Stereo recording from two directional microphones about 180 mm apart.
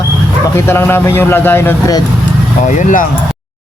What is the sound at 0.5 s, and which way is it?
Speech, 15° left (ahead or behind).